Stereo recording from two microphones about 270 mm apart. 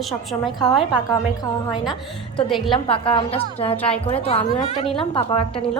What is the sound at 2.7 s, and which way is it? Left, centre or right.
A woman's voice, centre.